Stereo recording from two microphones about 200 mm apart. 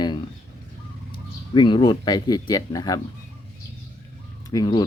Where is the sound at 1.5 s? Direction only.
25° left (ahead or behind).